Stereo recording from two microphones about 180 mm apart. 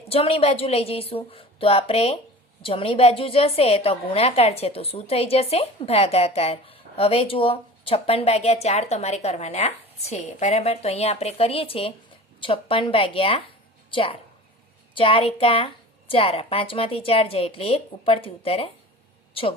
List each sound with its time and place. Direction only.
0.1 s a woman's voice: 35° left (ahead or behind)